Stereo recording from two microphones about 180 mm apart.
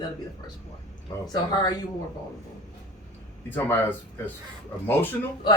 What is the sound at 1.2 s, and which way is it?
Speech, 20° left (ahead or behind).